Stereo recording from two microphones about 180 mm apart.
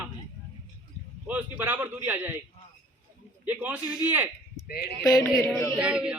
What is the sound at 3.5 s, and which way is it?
Speech, 10° right (ahead or behind).